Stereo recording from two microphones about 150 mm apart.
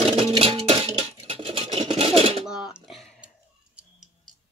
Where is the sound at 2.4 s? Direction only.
5° right (ahead or behind).